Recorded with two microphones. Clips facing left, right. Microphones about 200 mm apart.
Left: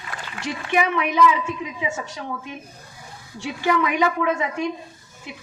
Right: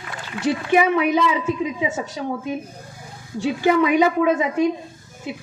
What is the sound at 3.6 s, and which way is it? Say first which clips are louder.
Speech: right 4 dB; 25° right (ahead or behind).